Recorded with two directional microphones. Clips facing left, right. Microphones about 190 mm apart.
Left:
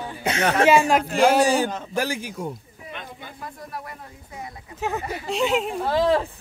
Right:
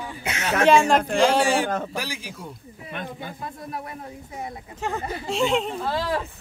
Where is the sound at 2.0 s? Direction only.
50° left (ahead or behind).